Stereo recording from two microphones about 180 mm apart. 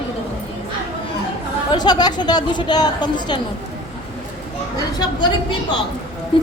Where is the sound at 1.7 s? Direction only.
25° left (ahead or behind).